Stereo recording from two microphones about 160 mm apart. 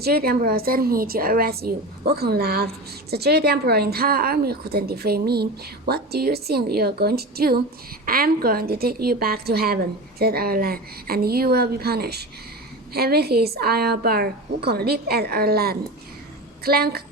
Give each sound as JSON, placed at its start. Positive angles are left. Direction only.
{"t": 0.0, "sound": "a woman's voice", "side_deg": -75}